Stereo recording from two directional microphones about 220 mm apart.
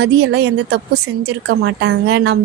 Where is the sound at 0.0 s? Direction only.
50° right (ahead or behind).